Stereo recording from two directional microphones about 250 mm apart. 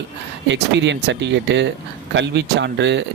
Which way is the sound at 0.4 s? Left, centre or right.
Right.